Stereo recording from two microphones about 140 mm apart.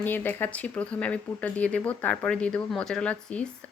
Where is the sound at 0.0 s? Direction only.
15° left (ahead or behind).